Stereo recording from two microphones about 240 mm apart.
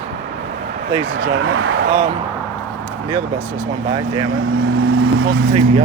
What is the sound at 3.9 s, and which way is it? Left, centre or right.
Speech, centre.